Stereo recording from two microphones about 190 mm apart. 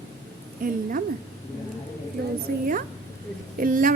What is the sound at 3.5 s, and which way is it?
Speech, 45° right (ahead or behind).